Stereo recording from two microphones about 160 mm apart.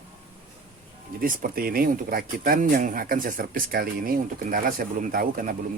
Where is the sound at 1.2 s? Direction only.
60° right (ahead or behind).